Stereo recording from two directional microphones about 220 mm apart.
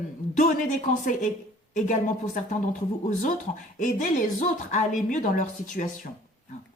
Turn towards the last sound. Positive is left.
turn(degrees=35)  # may be behind; listen again after turning